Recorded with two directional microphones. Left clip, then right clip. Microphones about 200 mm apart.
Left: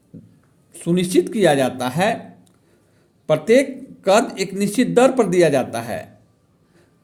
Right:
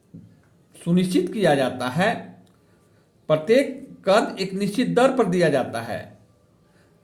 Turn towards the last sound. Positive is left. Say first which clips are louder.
# left 3 dB
turn(degrees=30)  # may be behind; listen again after turning